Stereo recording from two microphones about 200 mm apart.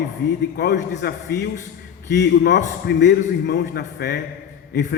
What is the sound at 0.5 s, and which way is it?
A man's voice, 55° left (ahead or behind).